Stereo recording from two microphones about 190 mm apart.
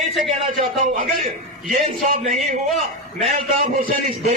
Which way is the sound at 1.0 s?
40° right (ahead or behind).